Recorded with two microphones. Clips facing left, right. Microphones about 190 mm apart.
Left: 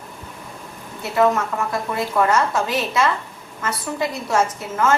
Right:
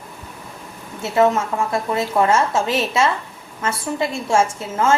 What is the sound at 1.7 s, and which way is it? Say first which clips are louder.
A woman's voice: right 3 dB; 25° right (ahead or behind).